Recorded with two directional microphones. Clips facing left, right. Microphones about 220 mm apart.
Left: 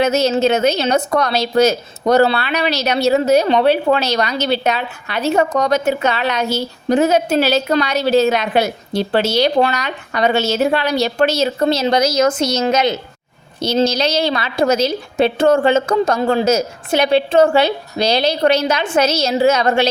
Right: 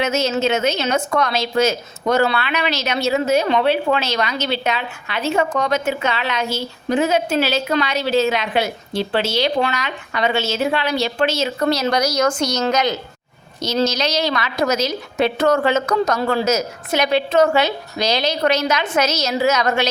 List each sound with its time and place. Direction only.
0.0 s a woman's voice: 35° left (ahead or behind)